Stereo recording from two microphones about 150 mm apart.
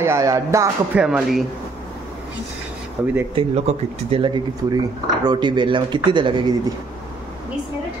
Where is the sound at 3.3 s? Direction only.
45° right (ahead or behind).